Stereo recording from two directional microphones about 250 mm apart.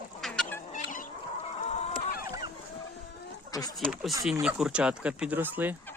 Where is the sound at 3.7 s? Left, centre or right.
Centre.